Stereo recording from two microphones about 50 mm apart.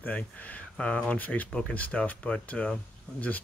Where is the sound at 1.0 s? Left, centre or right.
Left.